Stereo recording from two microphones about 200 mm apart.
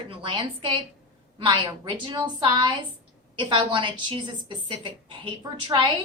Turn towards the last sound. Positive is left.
turn(degrees=-25)  # may be behind; listen again after turning